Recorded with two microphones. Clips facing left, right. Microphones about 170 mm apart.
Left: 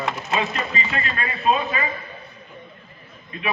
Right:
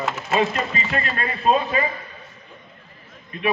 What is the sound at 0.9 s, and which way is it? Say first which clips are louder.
Speech: right 2 dB; 45° right (ahead or behind).